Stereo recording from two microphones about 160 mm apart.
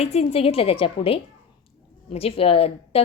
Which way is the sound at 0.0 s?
40° left (ahead or behind).